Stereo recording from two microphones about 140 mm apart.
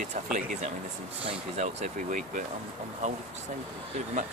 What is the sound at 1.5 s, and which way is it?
Speech, 55° right (ahead or behind).